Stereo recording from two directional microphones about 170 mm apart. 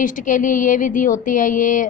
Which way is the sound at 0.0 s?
50° left (ahead or behind).